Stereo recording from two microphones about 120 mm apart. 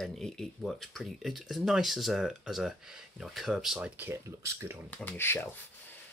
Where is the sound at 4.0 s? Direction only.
20° right (ahead or behind).